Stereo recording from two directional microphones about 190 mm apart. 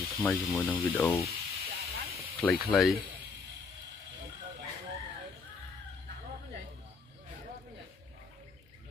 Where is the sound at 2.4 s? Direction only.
5° left (ahead or behind).